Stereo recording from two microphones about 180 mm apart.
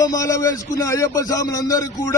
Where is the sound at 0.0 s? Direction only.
20° left (ahead or behind).